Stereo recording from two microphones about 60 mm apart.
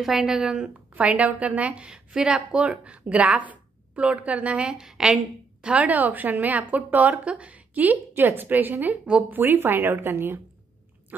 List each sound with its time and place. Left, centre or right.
0.0 s a woman's voice: centre
0.9 s a woman's voice: right